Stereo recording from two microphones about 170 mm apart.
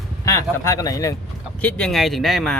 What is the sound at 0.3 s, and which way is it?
Speech, 15° left (ahead or behind).